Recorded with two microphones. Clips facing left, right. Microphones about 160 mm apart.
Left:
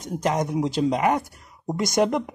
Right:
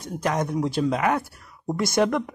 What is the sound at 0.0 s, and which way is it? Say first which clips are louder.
Speech: left 1 dB; 15° left (ahead or behind).